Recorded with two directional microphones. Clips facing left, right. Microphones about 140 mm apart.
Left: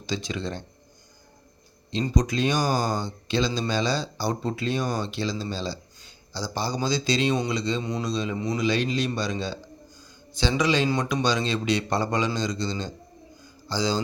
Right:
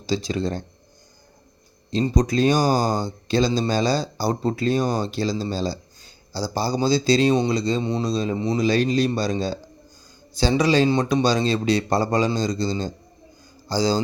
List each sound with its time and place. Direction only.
0.0 s speech: 35° right (ahead or behind)
2.0 s speech: 35° right (ahead or behind)